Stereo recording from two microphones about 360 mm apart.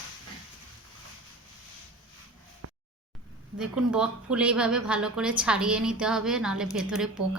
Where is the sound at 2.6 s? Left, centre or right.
Right.